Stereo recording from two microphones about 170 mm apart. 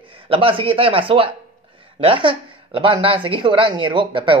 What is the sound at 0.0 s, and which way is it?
A man's voice, 30° right (ahead or behind).